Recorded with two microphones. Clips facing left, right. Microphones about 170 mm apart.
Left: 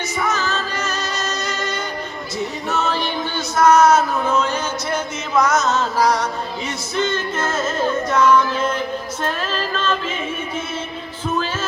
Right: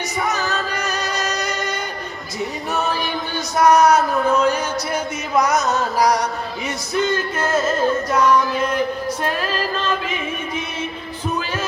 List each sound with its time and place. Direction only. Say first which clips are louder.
0.3 s music: even; 15° right (ahead or behind)
9.2 s music: even; 10° right (ahead or behind)